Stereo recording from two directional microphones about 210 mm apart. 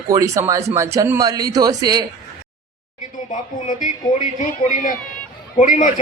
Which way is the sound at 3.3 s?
35° left (ahead or behind).